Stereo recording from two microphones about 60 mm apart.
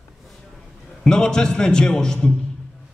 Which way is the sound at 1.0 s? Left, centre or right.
Centre.